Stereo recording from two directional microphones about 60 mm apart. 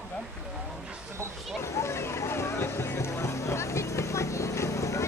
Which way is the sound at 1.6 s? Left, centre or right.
Left.